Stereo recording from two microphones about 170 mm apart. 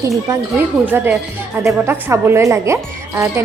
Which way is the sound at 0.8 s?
10° right (ahead or behind).